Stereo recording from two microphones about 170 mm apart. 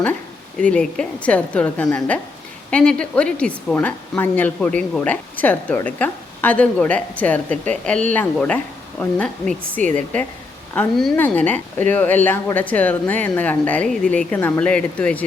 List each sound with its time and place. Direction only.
0.6 s speech: 5° left (ahead or behind)
9.8 s speech: 45° right (ahead or behind)
10.8 s speech: 5° left (ahead or behind)